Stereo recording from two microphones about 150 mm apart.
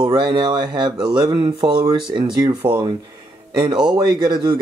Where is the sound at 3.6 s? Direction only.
30° right (ahead or behind).